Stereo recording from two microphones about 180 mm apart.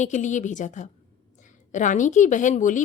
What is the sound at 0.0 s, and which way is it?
A woman's voice, 40° left (ahead or behind).